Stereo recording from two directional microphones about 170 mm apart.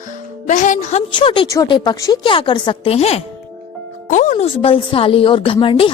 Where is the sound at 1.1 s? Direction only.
30° left (ahead or behind).